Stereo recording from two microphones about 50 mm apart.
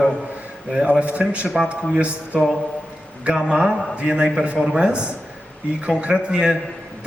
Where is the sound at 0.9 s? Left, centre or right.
Right.